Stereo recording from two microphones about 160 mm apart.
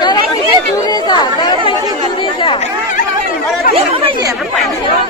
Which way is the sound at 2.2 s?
30° left (ahead or behind).